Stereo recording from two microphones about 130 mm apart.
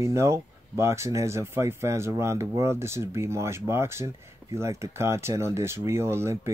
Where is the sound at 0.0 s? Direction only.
20° right (ahead or behind).